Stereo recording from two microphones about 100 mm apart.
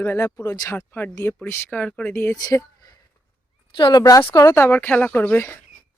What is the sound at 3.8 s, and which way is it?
Speech, 50° left (ahead or behind).